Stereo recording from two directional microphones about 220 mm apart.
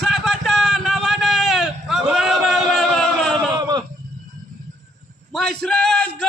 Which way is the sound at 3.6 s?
20° right (ahead or behind).